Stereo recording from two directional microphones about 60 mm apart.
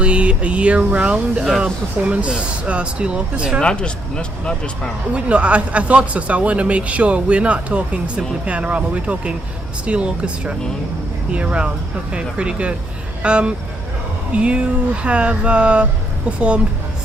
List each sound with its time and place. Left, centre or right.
0.0 s speech: centre
3.6 s speech: centre
5.1 s speech: right